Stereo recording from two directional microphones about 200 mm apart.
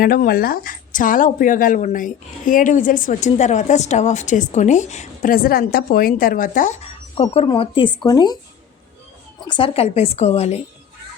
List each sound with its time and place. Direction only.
0.0 s speech: 50° left (ahead or behind); by 8.4 s 20° left (ahead or behind)
9.5 s speech: 25° left (ahead or behind)